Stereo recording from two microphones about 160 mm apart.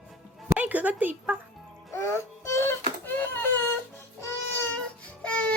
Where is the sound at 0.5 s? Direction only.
10° right (ahead or behind).